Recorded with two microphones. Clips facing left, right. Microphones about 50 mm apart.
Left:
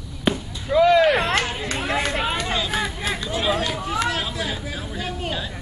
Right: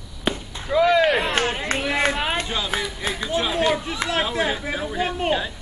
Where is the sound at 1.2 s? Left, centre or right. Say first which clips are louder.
Even; right.